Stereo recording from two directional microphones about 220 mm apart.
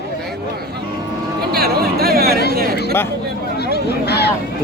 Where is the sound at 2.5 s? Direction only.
45° right (ahead or behind).